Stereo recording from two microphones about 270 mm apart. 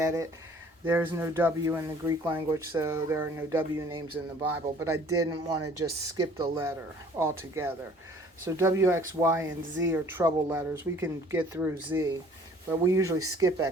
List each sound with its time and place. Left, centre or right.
0.0 s speech: centre
4.1 s speech: right
4.8 s speech: centre
5.5 s speech: right
5.8 s speech: centre
13.1 s speech: right